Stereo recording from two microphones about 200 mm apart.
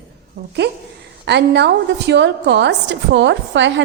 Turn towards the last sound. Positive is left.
turn(degrees=-65)  # may be behind; listen again after turning